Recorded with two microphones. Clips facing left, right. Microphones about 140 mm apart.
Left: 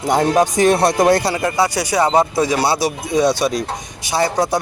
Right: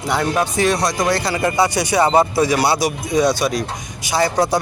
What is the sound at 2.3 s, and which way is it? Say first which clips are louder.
Speech: even; 25° left (ahead or behind).